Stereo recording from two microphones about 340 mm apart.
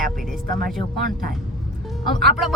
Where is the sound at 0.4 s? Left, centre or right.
Right.